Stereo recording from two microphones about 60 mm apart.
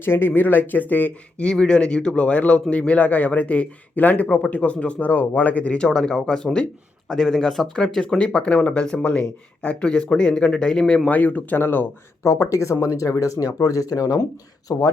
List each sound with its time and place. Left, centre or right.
0.0 s speech: left
1.5 s a man's voice: centre
5.9 s speech: centre
8.2 s speech: centre
11.1 s a man's voice: left
11.5 s speech: left
12.2 s speech: left
14.7 s speech: left